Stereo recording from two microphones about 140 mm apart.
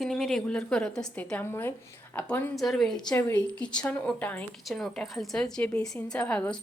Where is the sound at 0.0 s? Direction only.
Centre (ahead or behind).